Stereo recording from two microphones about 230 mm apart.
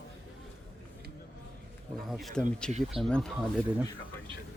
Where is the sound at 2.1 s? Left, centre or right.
Centre.